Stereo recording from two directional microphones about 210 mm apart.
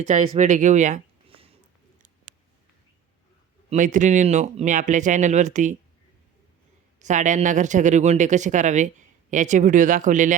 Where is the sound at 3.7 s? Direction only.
35° right (ahead or behind).